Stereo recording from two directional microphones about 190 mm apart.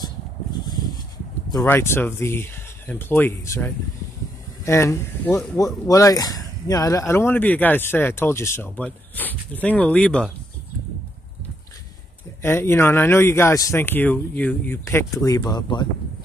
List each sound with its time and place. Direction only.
0.6 s a sound: 20° left (ahead or behind)
1.5 s speech: 15° left (ahead or behind)
12.4 s speech: 10° left (ahead or behind)